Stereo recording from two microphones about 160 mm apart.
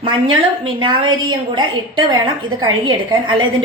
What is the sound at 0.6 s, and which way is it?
A woman's voice, 30° right (ahead or behind).